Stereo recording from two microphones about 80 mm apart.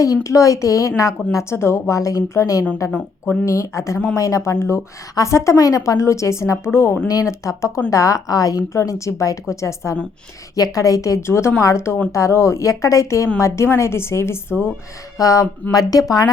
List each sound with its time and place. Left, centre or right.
0.0 s a woman's voice: left
7.1 s a woman's voice: left
15.2 s speech: left